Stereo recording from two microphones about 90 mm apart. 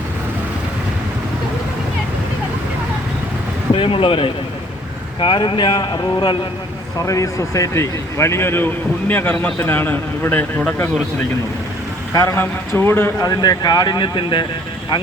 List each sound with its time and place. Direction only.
3.8 s a man's voice: 80° left
5.2 s speech: 65° left (ahead or behind)
7.0 s a man's voice: 35° left (ahead or behind)
12.1 s a man's voice: 35° left (ahead or behind)
13.2 s speech: 45° left (ahead or behind); by 14.4 s 65° left (ahead or behind)